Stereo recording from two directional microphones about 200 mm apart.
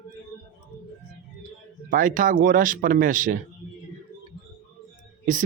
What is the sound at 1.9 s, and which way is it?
Speech, 40° right (ahead or behind).